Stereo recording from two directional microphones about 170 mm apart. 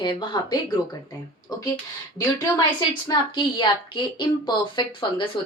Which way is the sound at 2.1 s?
25° left (ahead or behind).